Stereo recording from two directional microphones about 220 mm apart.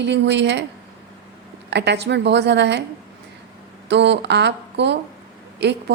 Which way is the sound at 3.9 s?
50° right (ahead or behind).